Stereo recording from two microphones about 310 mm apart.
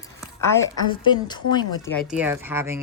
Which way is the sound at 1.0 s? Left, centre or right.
Centre.